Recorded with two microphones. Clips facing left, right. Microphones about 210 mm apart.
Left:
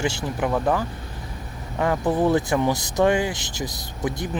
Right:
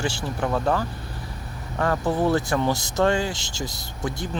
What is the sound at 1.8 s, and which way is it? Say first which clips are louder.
Speech: left 2 dB; 20° left (ahead or behind).